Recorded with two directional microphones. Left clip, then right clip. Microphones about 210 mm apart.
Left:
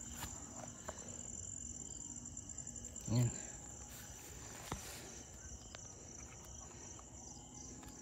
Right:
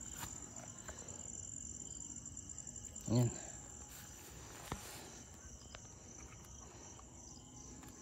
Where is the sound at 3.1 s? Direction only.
20° right (ahead or behind).